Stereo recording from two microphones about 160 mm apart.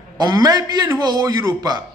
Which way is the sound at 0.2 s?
25° right (ahead or behind).